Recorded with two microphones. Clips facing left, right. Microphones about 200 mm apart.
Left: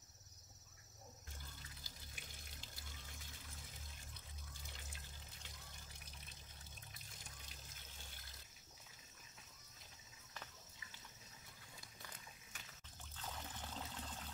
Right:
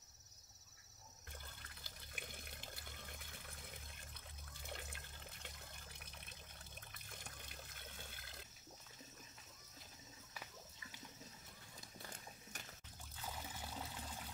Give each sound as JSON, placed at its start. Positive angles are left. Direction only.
{"t": 1.6, "sound": "water", "side_deg": -60}
{"t": 12.1, "sound": "horse", "side_deg": -45}
{"t": 13.1, "sound": "trickle", "side_deg": -10}